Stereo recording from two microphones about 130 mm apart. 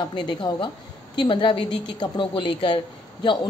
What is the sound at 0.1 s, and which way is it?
A woman's voice, 35° left (ahead or behind).